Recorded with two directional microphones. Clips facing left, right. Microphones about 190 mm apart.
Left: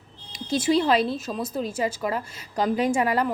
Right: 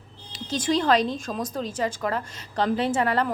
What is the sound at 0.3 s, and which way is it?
A woman's voice, 10° left (ahead or behind).